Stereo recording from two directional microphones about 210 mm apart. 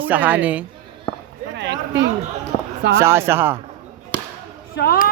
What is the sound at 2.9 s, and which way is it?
Speech, 10° right (ahead or behind).